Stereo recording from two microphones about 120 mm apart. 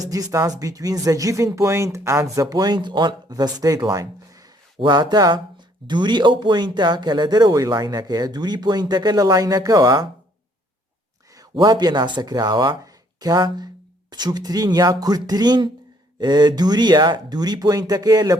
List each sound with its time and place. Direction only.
0.0 s speech: 30° right (ahead or behind)
3.8 s a sound: 30° right (ahead or behind)
4.8 s speech: 35° right (ahead or behind)
11.3 s speech: 35° right (ahead or behind)